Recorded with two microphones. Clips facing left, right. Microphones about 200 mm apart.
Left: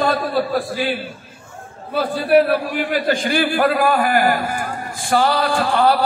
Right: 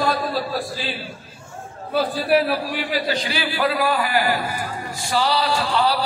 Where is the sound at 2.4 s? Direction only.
55° left (ahead or behind).